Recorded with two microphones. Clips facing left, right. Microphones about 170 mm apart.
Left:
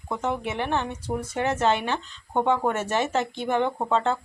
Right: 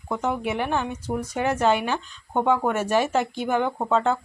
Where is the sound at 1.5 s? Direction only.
10° right (ahead or behind).